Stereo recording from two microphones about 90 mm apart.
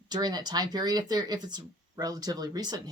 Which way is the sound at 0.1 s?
50° right (ahead or behind).